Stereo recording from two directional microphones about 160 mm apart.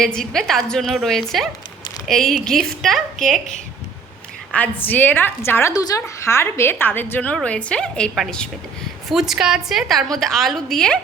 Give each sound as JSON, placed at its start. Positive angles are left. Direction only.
{"t": 0.0, "sound": "a woman's voice", "side_deg": 5}
{"t": 4.5, "sound": "a woman's voice", "side_deg": 10}